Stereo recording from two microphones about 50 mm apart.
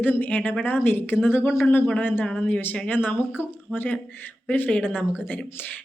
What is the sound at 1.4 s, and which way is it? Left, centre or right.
Speech, left.